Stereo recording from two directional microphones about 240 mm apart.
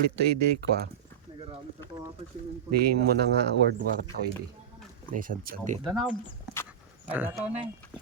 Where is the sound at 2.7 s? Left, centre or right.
Right.